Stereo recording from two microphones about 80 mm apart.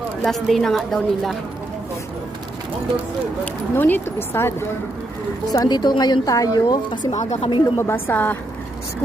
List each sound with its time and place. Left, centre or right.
0.3 s a woman's voice: centre
3.4 s speech: left
5.5 s a woman's voice: left
7.8 s speech: left